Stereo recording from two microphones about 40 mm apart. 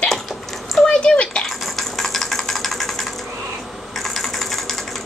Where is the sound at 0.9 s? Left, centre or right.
Left.